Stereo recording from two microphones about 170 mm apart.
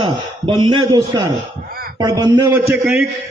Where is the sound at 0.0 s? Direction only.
25° right (ahead or behind).